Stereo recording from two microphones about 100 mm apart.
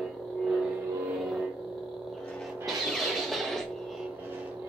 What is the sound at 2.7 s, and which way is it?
Music, centre (ahead or behind).